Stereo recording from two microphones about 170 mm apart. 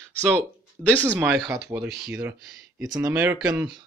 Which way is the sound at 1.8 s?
75° right (ahead or behind).